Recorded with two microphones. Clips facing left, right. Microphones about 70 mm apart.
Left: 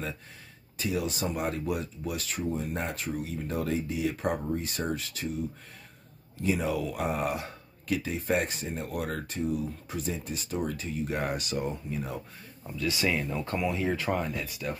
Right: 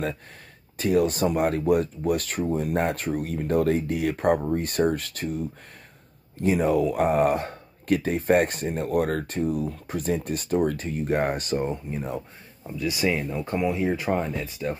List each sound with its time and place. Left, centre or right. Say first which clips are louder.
0.7 s speech: right 9 dB; right
12.6 s speech: right 4 dB; right